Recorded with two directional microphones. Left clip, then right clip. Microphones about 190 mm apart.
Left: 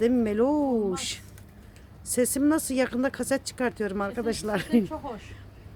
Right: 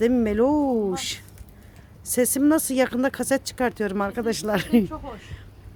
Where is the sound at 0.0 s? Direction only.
25° right (ahead or behind).